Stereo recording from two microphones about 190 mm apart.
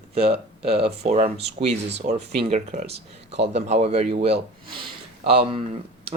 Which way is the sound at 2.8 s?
60° right (ahead or behind).